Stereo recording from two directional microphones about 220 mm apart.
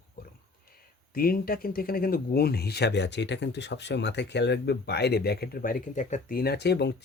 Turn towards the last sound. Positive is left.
turn(degrees=50)  # may be behind; listen again after turning